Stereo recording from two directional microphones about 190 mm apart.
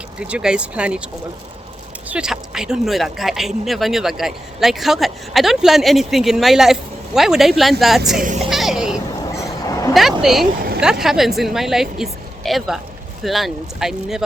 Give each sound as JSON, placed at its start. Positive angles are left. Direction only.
{"t": 0.2, "sound": "speech", "side_deg": -5}
{"t": 2.0, "sound": "speech", "side_deg": -5}
{"t": 8.2, "sound": "speech", "side_deg": -40}
{"t": 8.4, "sound": "a sound", "side_deg": 0}
{"t": 9.4, "sound": "vehicle", "side_deg": 15}
{"t": 9.9, "sound": "speech", "side_deg": 0}